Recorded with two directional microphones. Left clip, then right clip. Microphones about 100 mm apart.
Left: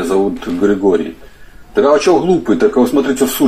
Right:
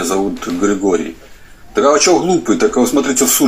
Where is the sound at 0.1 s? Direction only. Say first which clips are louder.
Left 2 dB; 20° left (ahead or behind).